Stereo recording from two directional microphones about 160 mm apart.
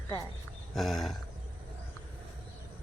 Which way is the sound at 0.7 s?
Centre (ahead or behind).